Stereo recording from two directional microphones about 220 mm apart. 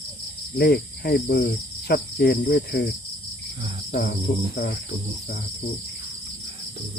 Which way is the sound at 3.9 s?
45° left (ahead or behind).